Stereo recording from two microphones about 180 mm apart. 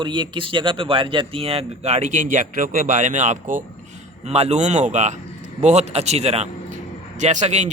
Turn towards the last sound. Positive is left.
turn(degrees=-40)  # may be behind; listen again after turning